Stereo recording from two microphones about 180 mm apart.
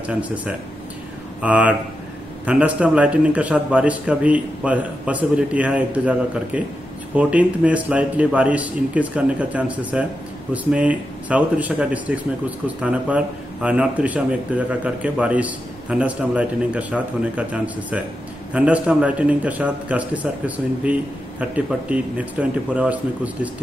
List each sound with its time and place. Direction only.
0.0 s speech: 5° right (ahead or behind)